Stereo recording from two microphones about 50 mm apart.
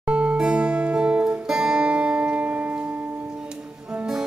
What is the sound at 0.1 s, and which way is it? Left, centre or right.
Music, right.